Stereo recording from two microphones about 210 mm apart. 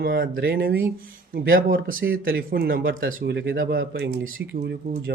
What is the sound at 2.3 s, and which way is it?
Speech, 45° right (ahead or behind).